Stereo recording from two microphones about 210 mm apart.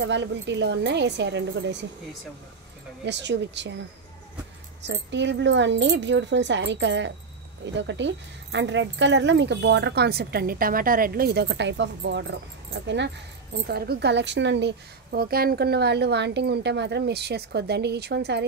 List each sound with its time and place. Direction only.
0.0 s speech: 55° right (ahead or behind)
3.1 s speech: 55° right (ahead or behind)
4.8 s a woman's voice: 55° right (ahead or behind)